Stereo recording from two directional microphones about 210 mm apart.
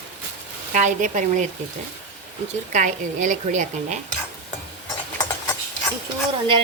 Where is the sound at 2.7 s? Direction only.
35° right (ahead or behind).